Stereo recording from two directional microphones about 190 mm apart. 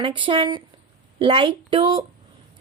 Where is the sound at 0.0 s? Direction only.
25° right (ahead or behind).